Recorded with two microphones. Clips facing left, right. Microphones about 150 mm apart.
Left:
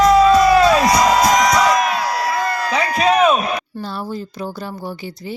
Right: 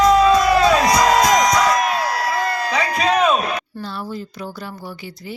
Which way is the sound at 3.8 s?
30° left (ahead or behind).